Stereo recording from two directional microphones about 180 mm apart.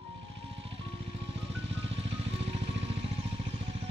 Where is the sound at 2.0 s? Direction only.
35° right (ahead or behind).